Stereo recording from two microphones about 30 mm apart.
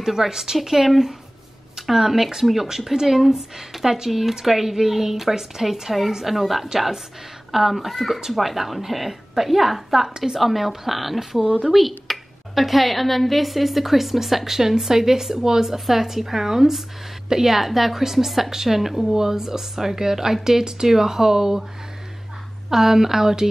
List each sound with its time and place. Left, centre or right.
0.0 s speech: centre
10.0 s speech: centre
10.3 s speech: centre
22.7 s speech: centre